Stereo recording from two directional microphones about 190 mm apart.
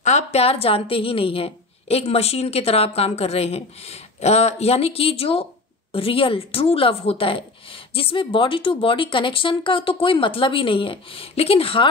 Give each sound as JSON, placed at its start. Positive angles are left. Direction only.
{"t": 0.0, "sound": "a woman's voice", "side_deg": 35}